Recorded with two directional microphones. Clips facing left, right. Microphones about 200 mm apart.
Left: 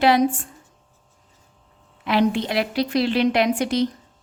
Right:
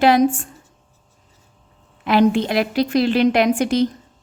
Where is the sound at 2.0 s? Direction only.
45° right (ahead or behind).